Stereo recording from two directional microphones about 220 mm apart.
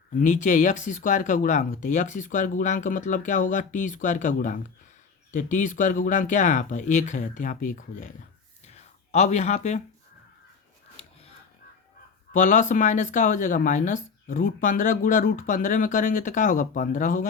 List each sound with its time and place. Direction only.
0.1 s speech: 35° left (ahead or behind)
8.6 s a sound: 30° left (ahead or behind)
12.3 s speech: 35° left (ahead or behind)